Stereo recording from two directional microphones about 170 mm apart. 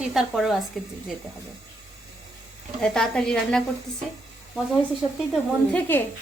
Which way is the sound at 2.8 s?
5° left (ahead or behind).